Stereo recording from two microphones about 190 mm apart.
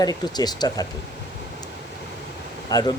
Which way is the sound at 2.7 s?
20° left (ahead or behind).